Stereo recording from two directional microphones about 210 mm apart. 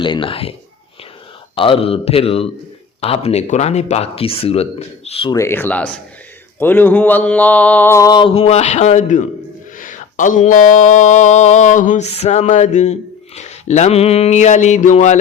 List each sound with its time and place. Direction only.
0.0 s speech: 25° left (ahead or behind)
1.5 s speech: 25° left (ahead or behind)
5.4 s mantra: 10° left (ahead or behind); by 9.2 s 35° left (ahead or behind)
9.7 s a sound: 40° left (ahead or behind)